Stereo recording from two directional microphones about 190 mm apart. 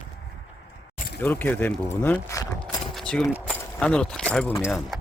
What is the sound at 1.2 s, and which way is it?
Speech, 10° left (ahead or behind).